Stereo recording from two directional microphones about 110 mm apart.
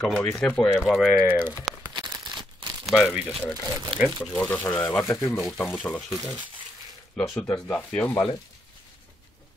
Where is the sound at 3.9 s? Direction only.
55° right (ahead or behind).